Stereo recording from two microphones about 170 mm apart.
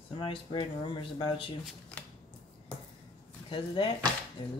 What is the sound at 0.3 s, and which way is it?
Speech, 30° left (ahead or behind).